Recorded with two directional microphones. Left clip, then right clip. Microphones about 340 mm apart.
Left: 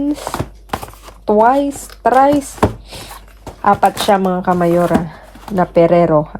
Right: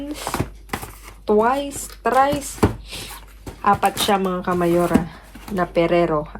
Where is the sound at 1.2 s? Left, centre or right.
Left.